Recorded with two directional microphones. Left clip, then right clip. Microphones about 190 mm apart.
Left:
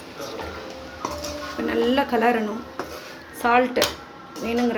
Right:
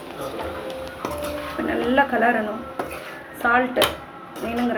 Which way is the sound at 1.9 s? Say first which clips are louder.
Right 4 dB; 55° left (ahead or behind).